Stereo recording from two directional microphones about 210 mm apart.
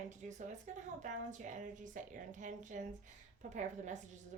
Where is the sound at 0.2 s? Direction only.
40° right (ahead or behind).